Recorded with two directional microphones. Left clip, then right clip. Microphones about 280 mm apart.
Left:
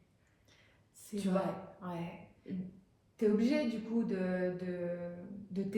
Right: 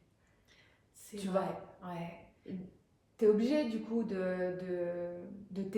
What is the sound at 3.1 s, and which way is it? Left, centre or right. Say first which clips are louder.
Speech: right 3 dB; centre.